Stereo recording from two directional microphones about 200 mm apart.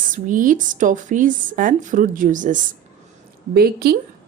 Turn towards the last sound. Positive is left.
turn(degrees=-50)  # may be behind; listen again after turning